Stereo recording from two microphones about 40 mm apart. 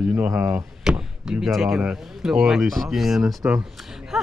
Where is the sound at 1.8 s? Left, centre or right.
Centre.